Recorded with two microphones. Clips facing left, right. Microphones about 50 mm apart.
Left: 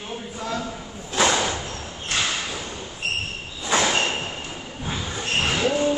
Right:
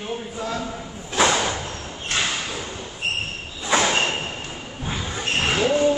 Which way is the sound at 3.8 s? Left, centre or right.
Centre.